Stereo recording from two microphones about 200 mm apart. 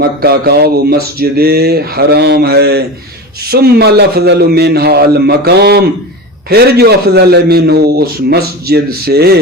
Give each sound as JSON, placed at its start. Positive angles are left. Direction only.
{"t": 0.2, "sound": "a man's voice", "side_deg": -50}